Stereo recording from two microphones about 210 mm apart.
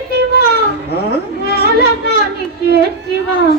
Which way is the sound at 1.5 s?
50° left (ahead or behind).